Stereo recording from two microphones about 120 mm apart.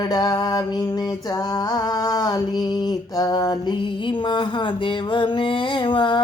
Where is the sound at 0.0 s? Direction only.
30° left (ahead or behind).